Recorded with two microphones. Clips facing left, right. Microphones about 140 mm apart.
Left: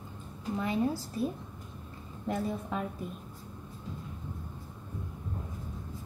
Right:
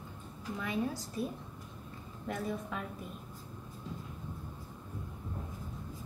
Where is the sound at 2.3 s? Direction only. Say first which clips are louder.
Left 4 dB; 30° left (ahead or behind).